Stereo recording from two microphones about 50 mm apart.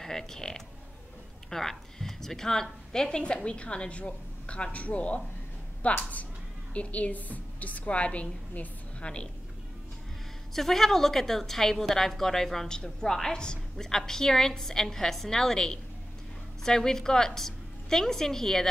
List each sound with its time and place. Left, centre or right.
0.0 s a woman's voice: centre
10.5 s a woman's voice: centre